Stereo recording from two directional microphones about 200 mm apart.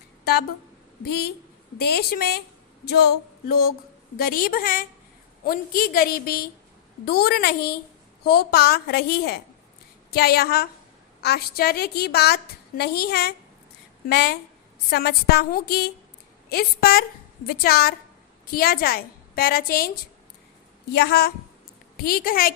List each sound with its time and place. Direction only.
1.9 s a woman's voice: 50° left (ahead or behind)
20.9 s a woman's voice: 50° left (ahead or behind)